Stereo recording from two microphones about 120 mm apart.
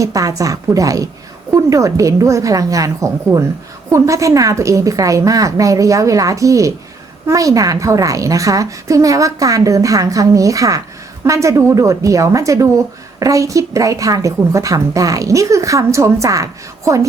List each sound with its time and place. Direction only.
0.0 s a woman's voice: 30° right (ahead or behind)